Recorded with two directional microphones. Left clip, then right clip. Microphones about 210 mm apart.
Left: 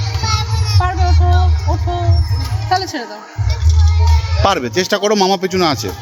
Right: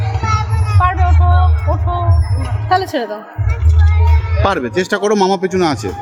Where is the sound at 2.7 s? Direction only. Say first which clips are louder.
Right 3 dB; 50° right (ahead or behind).